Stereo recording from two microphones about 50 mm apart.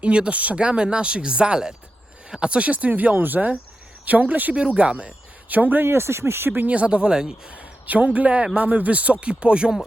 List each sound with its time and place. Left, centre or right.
0.0 s speech: right
4.5 s speech: right
5.5 s speech: right
5.8 s speech: right
6.7 s speech: right
7.5 s speech: right